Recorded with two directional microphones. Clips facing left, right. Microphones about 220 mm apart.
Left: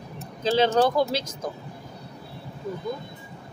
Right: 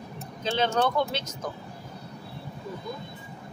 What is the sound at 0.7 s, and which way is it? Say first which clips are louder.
Speech: left 4 dB; 35° left (ahead or behind).